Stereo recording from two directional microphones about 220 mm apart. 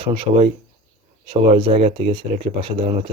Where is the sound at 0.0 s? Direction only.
25° right (ahead or behind).